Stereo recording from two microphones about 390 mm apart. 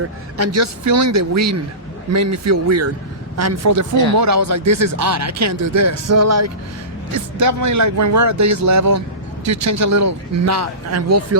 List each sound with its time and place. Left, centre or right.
0.3 s a man's voice: right